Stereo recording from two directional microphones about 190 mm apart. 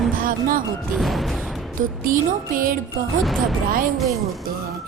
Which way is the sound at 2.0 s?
45° right (ahead or behind).